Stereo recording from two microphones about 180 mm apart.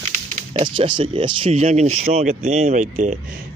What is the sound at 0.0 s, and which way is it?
Speech, 30° right (ahead or behind).